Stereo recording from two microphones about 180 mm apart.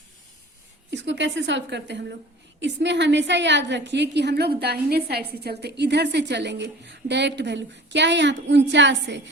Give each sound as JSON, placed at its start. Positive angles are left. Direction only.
{"t": 0.9, "sound": "a woman's voice", "side_deg": -90}